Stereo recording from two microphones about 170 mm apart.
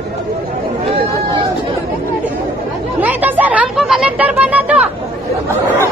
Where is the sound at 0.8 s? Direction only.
30° right (ahead or behind).